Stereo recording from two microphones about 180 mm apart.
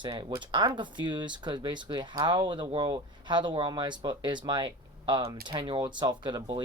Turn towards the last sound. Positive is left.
turn(degrees=-25)  # may be behind; listen again after turning